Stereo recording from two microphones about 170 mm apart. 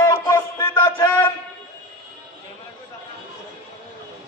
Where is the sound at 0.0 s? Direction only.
20° left (ahead or behind).